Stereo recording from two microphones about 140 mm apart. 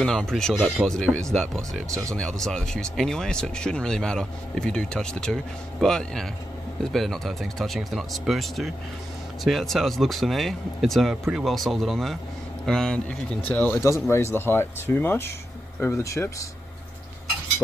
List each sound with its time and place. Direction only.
0.0 s speech: 5° left (ahead or behind); by 16.4 s 20° left (ahead or behind)